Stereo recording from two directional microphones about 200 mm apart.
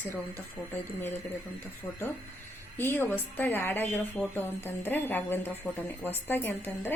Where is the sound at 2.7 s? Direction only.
10° left (ahead or behind).